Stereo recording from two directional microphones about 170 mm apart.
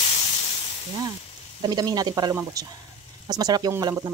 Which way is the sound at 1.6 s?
25° right (ahead or behind).